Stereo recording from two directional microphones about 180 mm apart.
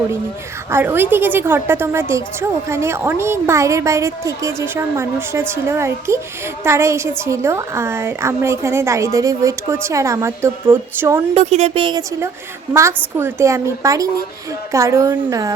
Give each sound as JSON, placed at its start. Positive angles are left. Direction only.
{"t": 0.7, "sound": "a woman's voice", "side_deg": -10}
{"t": 11.3, "sound": "a woman's voice", "side_deg": -35}